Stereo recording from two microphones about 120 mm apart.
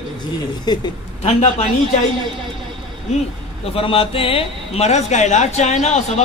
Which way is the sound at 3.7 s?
50° left (ahead or behind).